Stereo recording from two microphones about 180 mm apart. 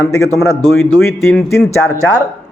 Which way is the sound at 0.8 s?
15° left (ahead or behind).